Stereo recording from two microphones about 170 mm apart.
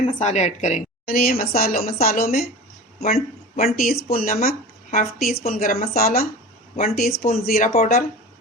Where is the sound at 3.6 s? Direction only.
60° left (ahead or behind).